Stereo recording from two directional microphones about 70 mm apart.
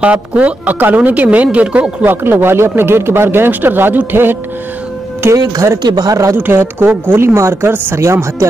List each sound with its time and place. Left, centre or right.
0.0 s speech: centre; by 5.4 s right
5.8 s speech: right
6.3 s speech: right
7.3 s speech: right